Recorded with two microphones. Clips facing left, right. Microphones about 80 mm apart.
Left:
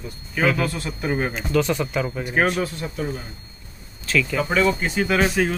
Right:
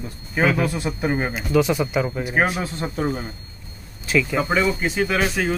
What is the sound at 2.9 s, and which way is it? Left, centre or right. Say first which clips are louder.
Speech: right 6 dB; right.